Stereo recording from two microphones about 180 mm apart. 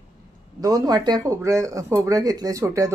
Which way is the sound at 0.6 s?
20° right (ahead or behind).